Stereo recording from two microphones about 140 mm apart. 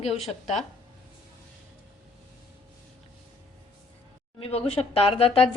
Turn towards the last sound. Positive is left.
turn(degrees=45)  # may be behind; listen again after turning